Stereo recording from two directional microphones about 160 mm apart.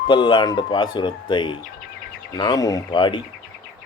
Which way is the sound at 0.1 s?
30° left (ahead or behind).